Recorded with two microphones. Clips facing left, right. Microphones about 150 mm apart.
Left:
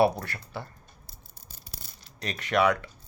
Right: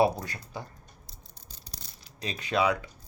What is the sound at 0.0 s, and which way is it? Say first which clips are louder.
Speech: left 1 dB; 20° right (ahead or behind).